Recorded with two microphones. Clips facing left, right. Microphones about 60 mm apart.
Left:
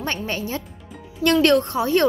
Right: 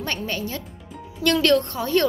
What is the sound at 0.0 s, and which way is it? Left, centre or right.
A woman's voice, centre.